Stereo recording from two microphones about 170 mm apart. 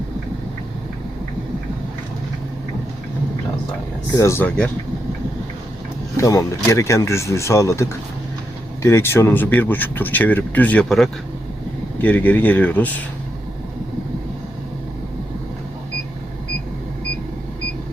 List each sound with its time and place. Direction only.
4.2 s speech: 15° left (ahead or behind)
6.1 s speech: 20° left (ahead or behind)